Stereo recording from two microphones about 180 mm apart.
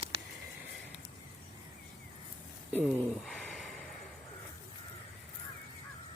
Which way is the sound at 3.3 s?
Centre (ahead or behind).